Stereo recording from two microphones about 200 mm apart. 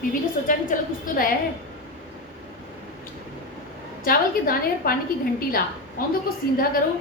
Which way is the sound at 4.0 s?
45° left (ahead or behind).